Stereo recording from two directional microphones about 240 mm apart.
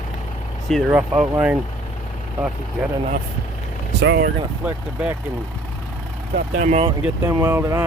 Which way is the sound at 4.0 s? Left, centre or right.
Right.